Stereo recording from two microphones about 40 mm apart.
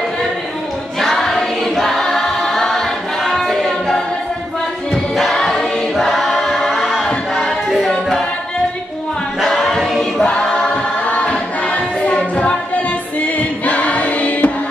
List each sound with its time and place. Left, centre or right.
0.9 s choir: centre
5.3 s choir: centre
5.9 s choir: centre
9.4 s choir: centre
10.2 s choir: left